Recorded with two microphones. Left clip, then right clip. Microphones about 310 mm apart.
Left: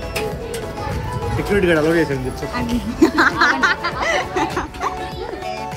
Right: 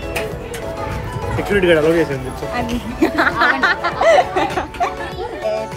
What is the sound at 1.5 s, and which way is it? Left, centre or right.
Speech, left.